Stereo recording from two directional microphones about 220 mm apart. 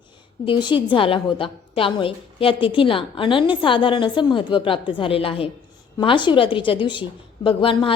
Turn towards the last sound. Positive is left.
turn(degrees=25)  # may be behind; listen again after turning